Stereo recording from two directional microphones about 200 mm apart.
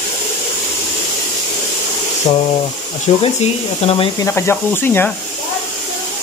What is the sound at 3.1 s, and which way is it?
Speech, 30° left (ahead or behind).